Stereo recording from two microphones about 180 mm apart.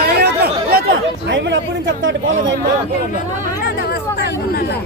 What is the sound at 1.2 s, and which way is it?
Speech, 80° right.